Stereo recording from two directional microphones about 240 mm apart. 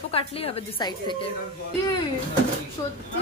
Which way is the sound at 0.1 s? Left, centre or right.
Left.